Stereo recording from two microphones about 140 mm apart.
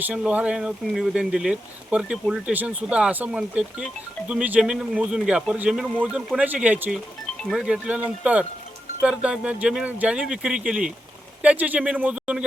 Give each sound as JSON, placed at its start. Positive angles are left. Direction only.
{"t": 0.0, "sound": "speech", "side_deg": -10}